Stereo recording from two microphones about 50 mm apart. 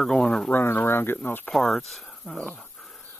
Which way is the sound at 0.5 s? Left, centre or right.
Left.